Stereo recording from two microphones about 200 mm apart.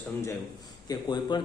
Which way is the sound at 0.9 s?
20° left (ahead or behind).